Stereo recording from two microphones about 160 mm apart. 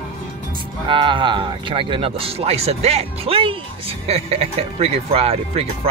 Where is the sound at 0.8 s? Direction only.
30° right (ahead or behind).